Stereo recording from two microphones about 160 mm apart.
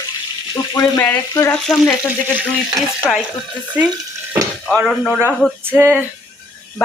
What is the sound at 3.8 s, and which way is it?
Speech, 10° right (ahead or behind).